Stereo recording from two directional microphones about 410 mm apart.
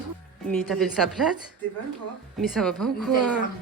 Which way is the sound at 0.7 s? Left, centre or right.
Centre.